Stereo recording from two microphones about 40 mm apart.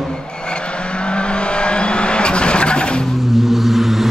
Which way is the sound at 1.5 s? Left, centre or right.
Left.